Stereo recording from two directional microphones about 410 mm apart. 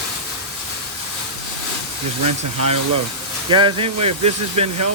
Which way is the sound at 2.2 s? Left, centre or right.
Right.